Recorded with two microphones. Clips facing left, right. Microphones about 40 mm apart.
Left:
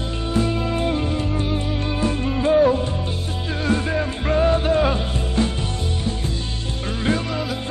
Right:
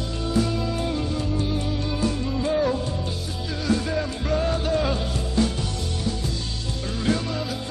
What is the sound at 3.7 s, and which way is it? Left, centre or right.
Music, left.